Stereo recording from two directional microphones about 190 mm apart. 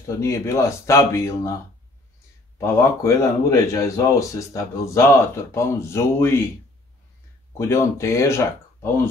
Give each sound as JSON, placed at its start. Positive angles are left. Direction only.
{"t": 0.0, "sound": "speech", "side_deg": 15}
{"t": 2.6, "sound": "speech", "side_deg": 15}
{"t": 7.5, "sound": "speech", "side_deg": 15}